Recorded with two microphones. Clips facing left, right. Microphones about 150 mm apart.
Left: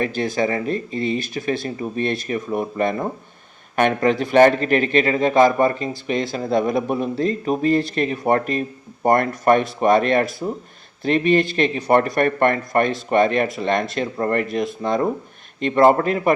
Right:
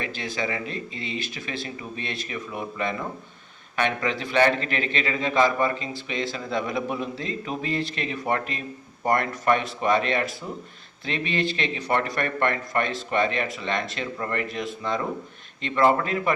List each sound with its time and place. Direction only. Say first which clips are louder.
0.0 s a man's voice: left 9 dB; 45° left (ahead or behind)